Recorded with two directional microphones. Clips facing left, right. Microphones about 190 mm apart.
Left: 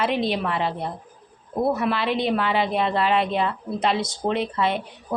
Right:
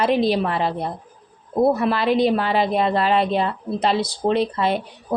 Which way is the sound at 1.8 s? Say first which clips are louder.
Right 5 dB; 40° right (ahead or behind).